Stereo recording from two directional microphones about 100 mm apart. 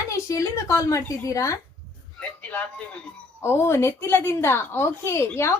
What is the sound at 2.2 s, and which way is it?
Speech, 15° left (ahead or behind).